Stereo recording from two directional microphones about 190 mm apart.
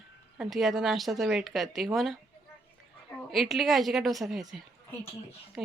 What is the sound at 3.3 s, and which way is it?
A woman's voice, centre (ahead or behind).